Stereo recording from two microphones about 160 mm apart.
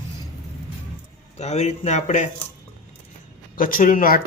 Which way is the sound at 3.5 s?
60° left (ahead or behind).